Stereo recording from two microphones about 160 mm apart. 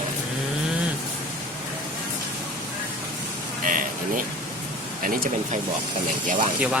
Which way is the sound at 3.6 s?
55° right (ahead or behind).